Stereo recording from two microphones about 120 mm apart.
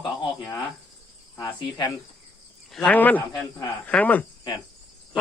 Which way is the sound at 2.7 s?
10° left (ahead or behind).